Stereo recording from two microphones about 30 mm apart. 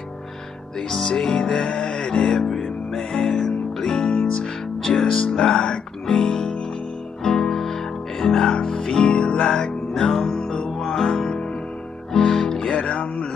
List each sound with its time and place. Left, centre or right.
0.7 s music: centre
2.3 s music: centre
4.1 s music: left
4.8 s music: centre; by 9.4 s left
9.4 s music: centre